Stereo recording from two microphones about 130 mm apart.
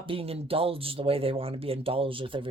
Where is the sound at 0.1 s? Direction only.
45° right (ahead or behind).